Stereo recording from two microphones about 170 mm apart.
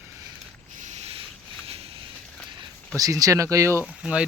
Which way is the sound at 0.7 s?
45° right (ahead or behind).